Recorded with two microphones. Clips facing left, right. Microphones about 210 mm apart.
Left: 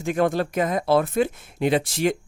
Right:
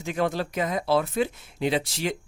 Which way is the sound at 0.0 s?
50° left (ahead or behind).